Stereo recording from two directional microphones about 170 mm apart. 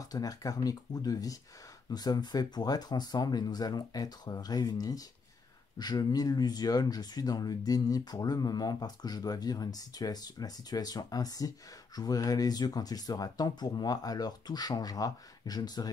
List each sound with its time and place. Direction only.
0.0 s speech: 20° left (ahead or behind)